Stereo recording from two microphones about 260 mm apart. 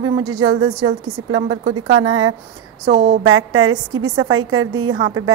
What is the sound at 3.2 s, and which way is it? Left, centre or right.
A woman's voice, right.